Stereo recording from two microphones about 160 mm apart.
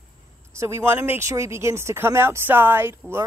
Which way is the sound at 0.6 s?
15° right (ahead or behind).